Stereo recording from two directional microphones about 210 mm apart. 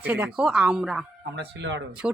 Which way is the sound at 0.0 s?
10° right (ahead or behind).